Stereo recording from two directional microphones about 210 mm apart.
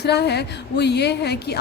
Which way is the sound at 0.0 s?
50° left (ahead or behind).